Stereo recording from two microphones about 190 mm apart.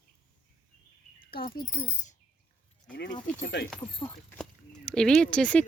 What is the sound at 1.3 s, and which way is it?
Speech, 50° left (ahead or behind).